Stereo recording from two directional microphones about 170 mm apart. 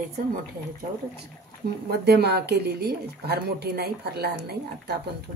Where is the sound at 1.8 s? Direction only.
70° right (ahead or behind).